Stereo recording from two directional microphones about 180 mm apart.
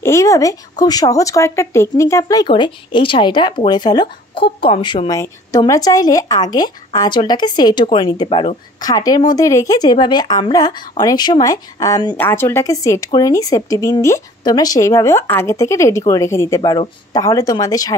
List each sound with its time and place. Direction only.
0.0 s speech: 15° left (ahead or behind)